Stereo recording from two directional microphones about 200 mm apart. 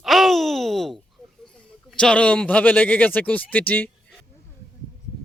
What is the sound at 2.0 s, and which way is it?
Speech, 5° left (ahead or behind).